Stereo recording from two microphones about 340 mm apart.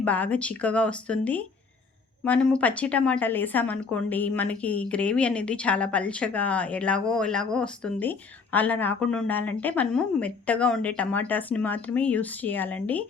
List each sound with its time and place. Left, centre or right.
0.0 s speech: centre